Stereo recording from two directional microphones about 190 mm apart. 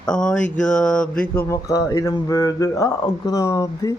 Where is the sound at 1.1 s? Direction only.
10° left (ahead or behind).